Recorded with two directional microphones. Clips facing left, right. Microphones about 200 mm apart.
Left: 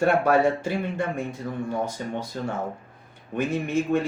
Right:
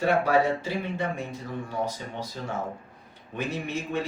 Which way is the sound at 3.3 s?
50° left (ahead or behind).